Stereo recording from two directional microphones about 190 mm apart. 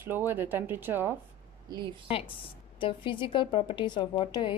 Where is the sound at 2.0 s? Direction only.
30° left (ahead or behind).